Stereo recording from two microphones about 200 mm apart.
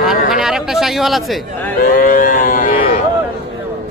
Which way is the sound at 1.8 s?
45° left (ahead or behind).